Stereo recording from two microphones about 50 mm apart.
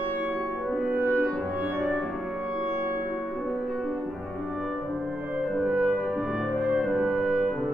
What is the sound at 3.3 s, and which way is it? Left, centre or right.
Music, centre.